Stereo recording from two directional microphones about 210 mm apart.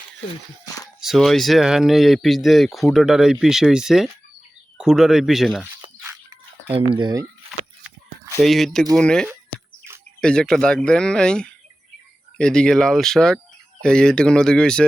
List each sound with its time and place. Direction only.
1.0 s speech: centre (ahead or behind)
6.0 s a sound: 10° right (ahead or behind)
6.7 s speech: 25° right (ahead or behind)
8.4 s speech: centre (ahead or behind)